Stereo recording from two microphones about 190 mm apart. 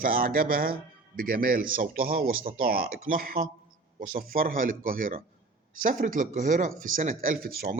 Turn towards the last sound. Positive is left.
turn(degrees=-50)  # may be behind; listen again after turning